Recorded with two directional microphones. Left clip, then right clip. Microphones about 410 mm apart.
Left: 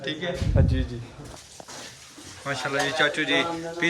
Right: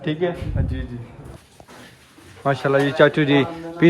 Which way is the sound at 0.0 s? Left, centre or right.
Centre.